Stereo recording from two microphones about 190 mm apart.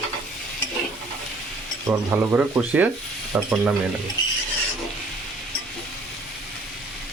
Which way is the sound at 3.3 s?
5° right (ahead or behind).